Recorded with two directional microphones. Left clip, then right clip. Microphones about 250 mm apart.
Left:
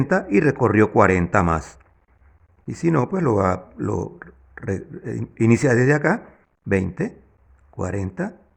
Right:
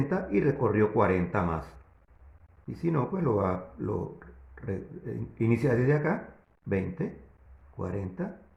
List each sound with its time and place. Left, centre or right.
0.1 s speech: left